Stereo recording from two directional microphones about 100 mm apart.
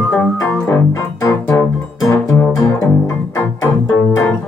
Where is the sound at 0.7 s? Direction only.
30° left (ahead or behind).